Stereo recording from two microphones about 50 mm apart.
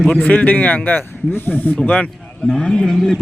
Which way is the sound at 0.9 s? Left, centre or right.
Left.